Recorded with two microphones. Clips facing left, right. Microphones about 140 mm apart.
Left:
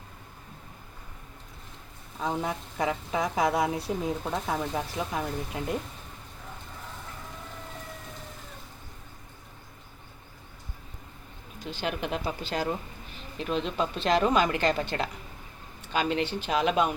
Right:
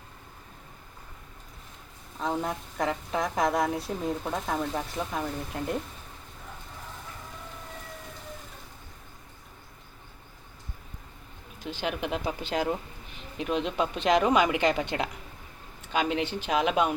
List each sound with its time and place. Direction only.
2.1 s a woman's voice: centre (ahead or behind)
11.8 s a woman's voice: 5° right (ahead or behind)
12.2 s speech: 15° right (ahead or behind)